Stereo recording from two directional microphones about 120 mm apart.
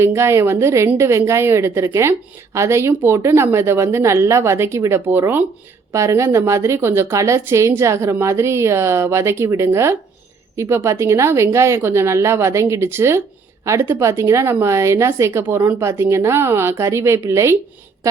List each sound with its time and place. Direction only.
0.0 s a woman's voice: 20° right (ahead or behind)